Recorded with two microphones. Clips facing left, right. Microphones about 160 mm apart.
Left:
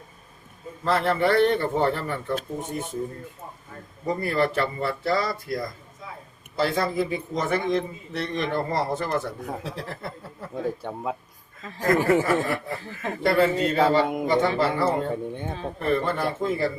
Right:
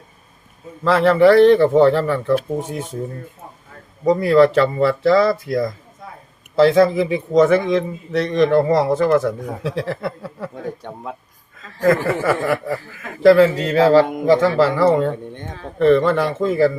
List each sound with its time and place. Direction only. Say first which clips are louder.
0.9 s a man's voice: right 10 dB; 90° right
4.0 s a man's voice: right 11 dB; 90° right
10.8 s speech: left 1 dB; 5° left (ahead or behind)
12.2 s a man's voice: right 5 dB; 90° right
15.1 s speech: left 1 dB; 10° left (ahead or behind)
15.8 s a man's voice: right 11 dB; 90° right